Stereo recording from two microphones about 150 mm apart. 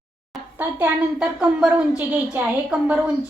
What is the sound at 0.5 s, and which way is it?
A woman's voice, 10° right (ahead or behind).